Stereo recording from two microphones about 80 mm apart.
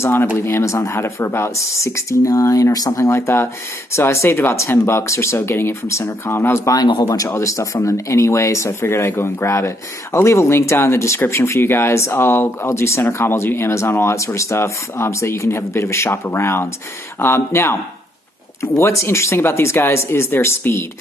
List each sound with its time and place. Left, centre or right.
0.0 s speech: left
3.1 s speech: left
7.0 s speech: left